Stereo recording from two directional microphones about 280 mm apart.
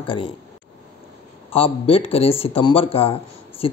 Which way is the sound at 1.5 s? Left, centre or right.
Centre.